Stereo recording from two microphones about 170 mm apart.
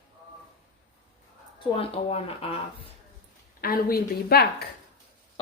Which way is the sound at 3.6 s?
60° left (ahead or behind).